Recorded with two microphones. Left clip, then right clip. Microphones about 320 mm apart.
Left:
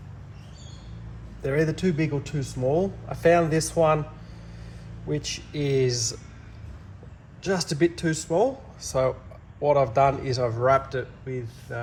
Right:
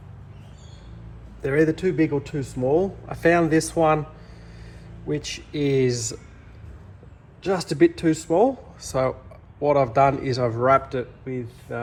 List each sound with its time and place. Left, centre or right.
1.4 s a man's voice: right
5.0 s a man's voice: right
7.4 s a man's voice: right